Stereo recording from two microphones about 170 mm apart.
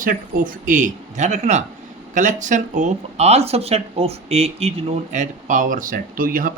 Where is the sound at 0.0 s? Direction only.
55° right (ahead or behind); by 4.7 s 35° right (ahead or behind).